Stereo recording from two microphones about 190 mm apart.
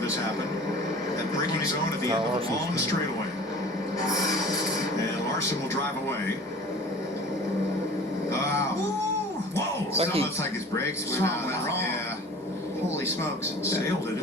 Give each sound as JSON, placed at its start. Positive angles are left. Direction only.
{"t": 9.9, "sound": "speech", "side_deg": -30}
{"t": 10.8, "sound": "speech", "side_deg": 15}